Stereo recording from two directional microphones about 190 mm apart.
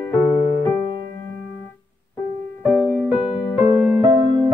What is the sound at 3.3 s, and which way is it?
Music, 30° left (ahead or behind).